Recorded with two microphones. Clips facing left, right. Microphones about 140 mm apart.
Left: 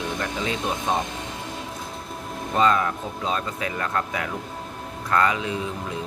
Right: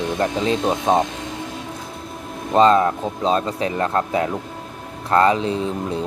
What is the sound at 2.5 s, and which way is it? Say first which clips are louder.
Speech: right 7 dB; 30° right (ahead or behind).